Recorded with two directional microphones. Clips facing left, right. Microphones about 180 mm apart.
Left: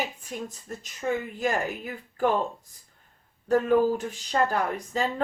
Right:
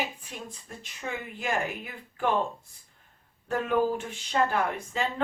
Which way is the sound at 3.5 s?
40° left (ahead or behind).